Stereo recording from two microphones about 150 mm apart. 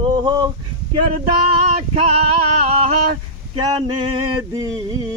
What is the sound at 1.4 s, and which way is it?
Female singing, 45° right (ahead or behind).